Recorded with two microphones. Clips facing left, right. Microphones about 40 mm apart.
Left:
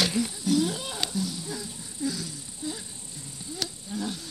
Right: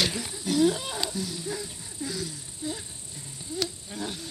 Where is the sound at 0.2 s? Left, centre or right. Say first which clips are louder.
Right 1 dB; right.